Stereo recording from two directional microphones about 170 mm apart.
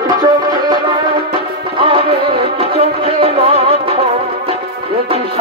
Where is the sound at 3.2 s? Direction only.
35° right (ahead or behind).